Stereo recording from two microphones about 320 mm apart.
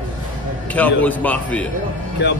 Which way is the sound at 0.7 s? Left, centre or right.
Centre.